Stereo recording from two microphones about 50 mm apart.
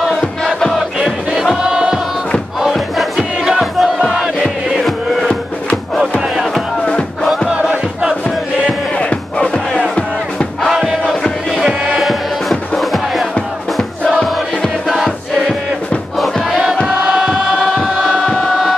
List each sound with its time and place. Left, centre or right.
0.2 s crowd: centre
0.7 s music: centre
1.7 s choir: centre
2.7 s crowd: centre
4.4 s music: centre
7.4 s crowd: centre
8.9 s battle cry: left
10.7 s crowd: centre
11.1 s music: centre
14.9 s music: centre
16.4 s choir: centre
18.2 s music: centre